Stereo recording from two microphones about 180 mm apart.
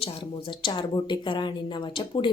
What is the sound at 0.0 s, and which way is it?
Speech, 30° left (ahead or behind).